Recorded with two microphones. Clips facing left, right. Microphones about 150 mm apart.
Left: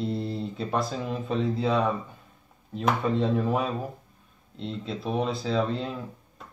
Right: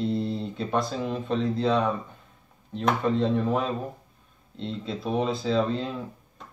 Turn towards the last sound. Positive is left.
turn(degrees=0)  # may be behind; listen again after turning